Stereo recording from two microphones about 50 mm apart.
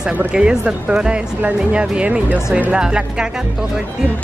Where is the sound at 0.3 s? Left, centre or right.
Right.